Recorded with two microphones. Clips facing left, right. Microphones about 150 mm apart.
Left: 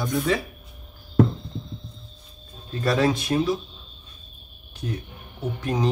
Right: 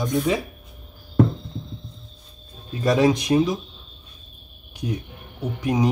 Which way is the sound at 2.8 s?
15° right (ahead or behind).